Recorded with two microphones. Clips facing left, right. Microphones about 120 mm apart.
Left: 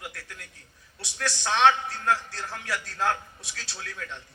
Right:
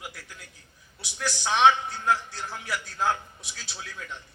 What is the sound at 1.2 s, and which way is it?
A man's voice, 10° right (ahead or behind).